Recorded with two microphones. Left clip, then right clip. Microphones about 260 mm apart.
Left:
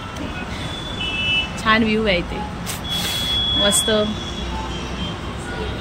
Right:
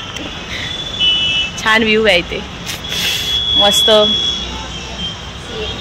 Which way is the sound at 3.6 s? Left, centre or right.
Centre.